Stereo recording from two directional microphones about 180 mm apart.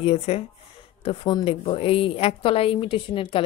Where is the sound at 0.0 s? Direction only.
35° left (ahead or behind).